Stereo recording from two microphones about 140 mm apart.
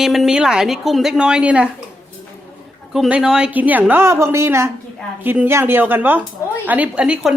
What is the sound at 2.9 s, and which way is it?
A woman's voice, 5° right (ahead or behind).